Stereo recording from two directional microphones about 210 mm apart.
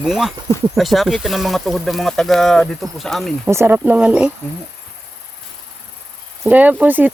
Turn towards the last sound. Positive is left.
turn(degrees=-10)  # may be behind; listen again after turning